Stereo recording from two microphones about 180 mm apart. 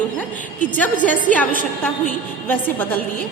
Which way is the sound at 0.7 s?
10° left (ahead or behind).